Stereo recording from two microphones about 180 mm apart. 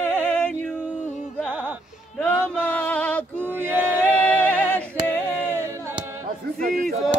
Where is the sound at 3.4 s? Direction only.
10° right (ahead or behind).